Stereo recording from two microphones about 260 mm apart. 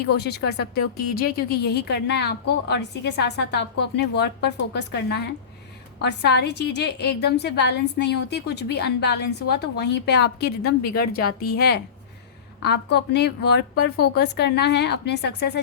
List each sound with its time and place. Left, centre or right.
0.2 s speech: left